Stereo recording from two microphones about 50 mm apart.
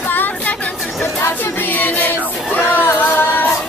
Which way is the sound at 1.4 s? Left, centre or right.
Left.